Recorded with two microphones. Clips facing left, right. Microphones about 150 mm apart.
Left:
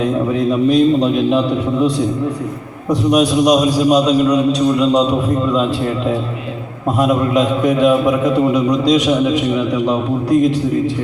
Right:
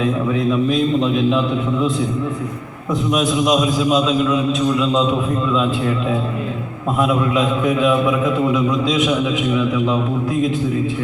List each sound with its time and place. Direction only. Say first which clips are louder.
0.7 s a man's voice: left 5 dB; 40° left (ahead or behind)
3.2 s a man's voice: left 4 dB; 40° left (ahead or behind)
7.0 s a man's voice: left 3 dB; 40° left (ahead or behind)